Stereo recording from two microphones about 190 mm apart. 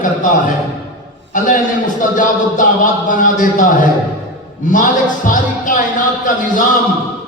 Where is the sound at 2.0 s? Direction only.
45° left (ahead or behind).